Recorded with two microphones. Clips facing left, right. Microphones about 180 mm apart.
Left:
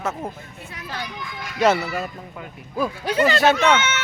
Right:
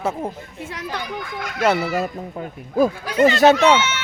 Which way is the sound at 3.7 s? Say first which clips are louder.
Right 2 dB; 50° left (ahead or behind).